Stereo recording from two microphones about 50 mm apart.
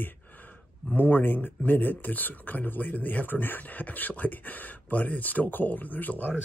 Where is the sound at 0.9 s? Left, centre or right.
Left.